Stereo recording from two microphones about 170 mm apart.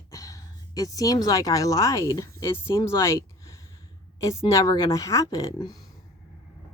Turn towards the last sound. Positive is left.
turn(degrees=25)  # may be behind; listen again after turning